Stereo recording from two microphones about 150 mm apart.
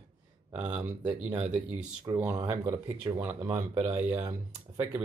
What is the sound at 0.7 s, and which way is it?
Speech, 15° right (ahead or behind).